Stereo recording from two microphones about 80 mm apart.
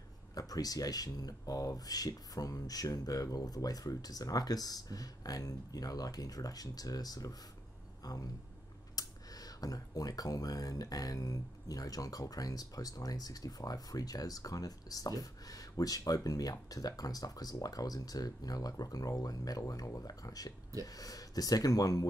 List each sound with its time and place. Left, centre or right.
0.3 s speech: left